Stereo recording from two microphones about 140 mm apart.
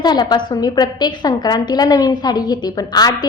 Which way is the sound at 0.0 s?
30° left (ahead or behind).